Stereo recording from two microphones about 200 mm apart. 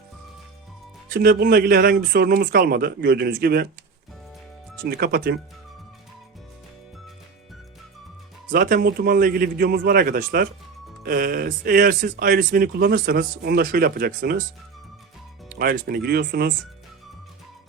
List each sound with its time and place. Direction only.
1.1 s speech: 50° right (ahead or behind)
4.9 s speech: 50° right (ahead or behind)
8.4 s speech: 40° right (ahead or behind)
15.5 s speech: 50° right (ahead or behind)